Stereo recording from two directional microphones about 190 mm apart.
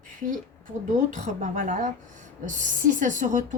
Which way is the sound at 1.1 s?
40° right (ahead or behind).